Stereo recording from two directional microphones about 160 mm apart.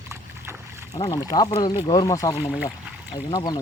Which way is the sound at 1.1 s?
25° left (ahead or behind).